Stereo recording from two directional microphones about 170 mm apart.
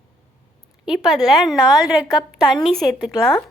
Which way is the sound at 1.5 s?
25° left (ahead or behind).